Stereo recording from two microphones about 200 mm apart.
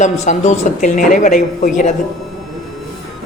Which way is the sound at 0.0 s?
35° left (ahead or behind).